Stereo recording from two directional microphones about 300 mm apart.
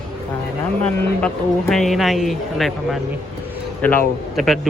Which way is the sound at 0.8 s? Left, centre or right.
Centre.